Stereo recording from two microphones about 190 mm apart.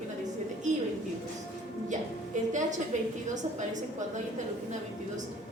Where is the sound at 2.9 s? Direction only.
40° right (ahead or behind).